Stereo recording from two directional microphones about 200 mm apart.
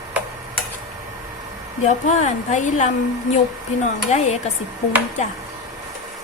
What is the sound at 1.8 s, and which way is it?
Speech, 35° left (ahead or behind).